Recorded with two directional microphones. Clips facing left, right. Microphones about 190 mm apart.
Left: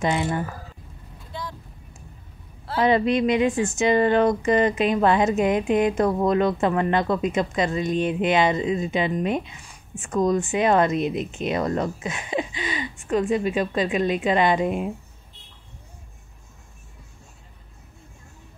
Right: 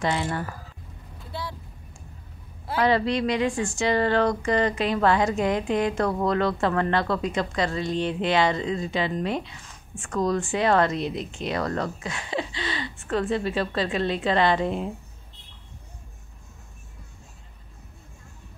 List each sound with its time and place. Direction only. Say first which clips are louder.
0.0 s speech: left 3 dB; 15° left (ahead or behind)
2.8 s speech: left 3 dB; 20° left (ahead or behind)